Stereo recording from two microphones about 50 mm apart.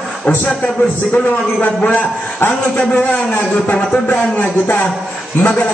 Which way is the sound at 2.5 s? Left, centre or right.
Left.